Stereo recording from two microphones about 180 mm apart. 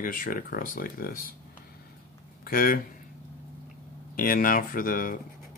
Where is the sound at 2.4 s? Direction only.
55° left (ahead or behind).